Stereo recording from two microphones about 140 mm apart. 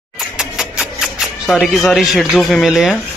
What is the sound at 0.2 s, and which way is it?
Music, 5° right (ahead or behind).